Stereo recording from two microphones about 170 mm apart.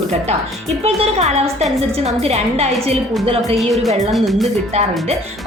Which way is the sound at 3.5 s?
Centre (ahead or behind).